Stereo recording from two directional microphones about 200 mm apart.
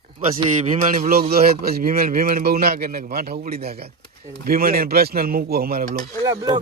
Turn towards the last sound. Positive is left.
turn(degrees=-20)  # may be behind; listen again after turning